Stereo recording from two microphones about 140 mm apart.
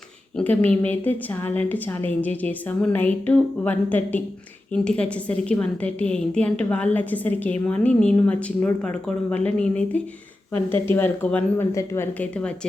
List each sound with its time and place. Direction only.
0.3 s a woman's voice: 10° left (ahead or behind)
11.7 s a woman's voice: 20° left (ahead or behind)
12.2 s a woman's voice: 10° left (ahead or behind)